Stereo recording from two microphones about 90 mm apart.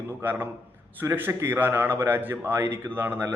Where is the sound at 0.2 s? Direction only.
20° right (ahead or behind).